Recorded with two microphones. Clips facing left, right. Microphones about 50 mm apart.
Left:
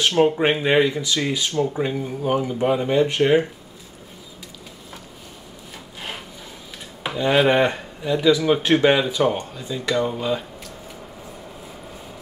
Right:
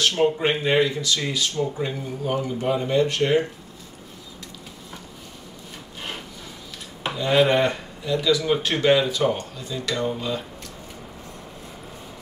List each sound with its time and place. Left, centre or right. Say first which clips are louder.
0.2 s speech: left 5 dB; centre
7.2 s speech: left 2 dB; centre